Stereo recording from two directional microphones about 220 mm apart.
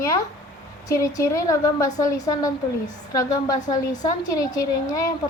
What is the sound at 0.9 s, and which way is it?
A woman's voice, 15° left (ahead or behind).